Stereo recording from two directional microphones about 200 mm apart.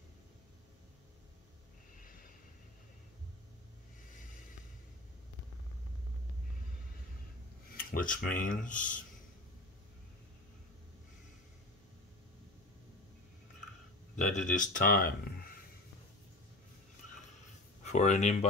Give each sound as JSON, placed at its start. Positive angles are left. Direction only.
{"t": 7.7, "sound": "speech", "side_deg": 45}
{"t": 14.1, "sound": "speech", "side_deg": 40}
{"t": 17.8, "sound": "speech", "side_deg": 35}